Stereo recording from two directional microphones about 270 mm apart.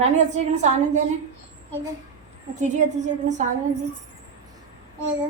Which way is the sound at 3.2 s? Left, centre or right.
Right.